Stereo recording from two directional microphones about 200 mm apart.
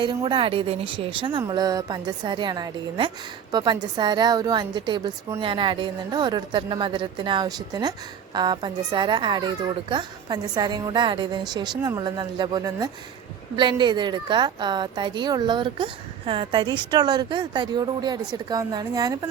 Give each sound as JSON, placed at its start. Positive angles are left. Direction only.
{"t": 0.0, "sound": "a woman's voice", "side_deg": -20}